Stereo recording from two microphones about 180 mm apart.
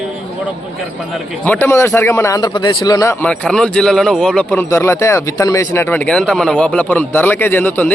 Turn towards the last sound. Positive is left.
turn(degrees=10)  # may be behind; listen again after turning